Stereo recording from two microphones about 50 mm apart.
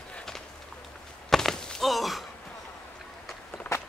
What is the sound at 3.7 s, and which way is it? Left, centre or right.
Walk, left.